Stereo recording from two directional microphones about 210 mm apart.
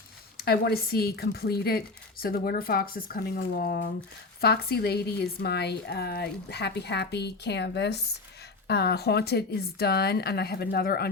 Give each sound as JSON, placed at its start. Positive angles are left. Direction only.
{"t": 0.3, "sound": "a woman's voice", "side_deg": 50}